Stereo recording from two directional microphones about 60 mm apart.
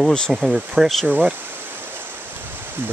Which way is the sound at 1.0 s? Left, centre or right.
Right.